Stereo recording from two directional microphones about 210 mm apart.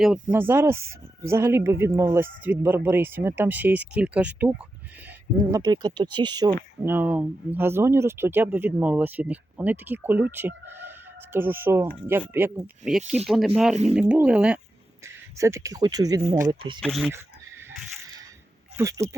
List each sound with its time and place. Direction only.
0.0 s speech: 5° right (ahead or behind)
6.8 s speech: 10° right (ahead or behind)
16.8 s speech: centre (ahead or behind)
18.8 s speech: 15° right (ahead or behind)